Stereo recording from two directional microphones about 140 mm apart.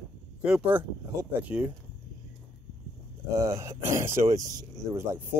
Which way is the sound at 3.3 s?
25° right (ahead or behind).